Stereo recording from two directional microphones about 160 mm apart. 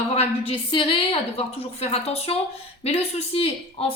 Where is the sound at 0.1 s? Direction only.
40° left (ahead or behind).